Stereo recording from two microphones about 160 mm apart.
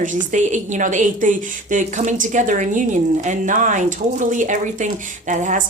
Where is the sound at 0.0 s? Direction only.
55° right (ahead or behind).